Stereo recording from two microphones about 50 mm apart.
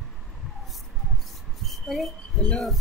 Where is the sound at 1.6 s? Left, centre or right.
Centre.